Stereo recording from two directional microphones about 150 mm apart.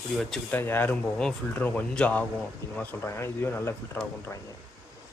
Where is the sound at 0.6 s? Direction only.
15° left (ahead or behind).